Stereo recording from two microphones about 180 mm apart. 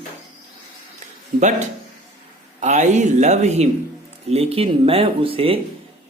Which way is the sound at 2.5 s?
40° right (ahead or behind).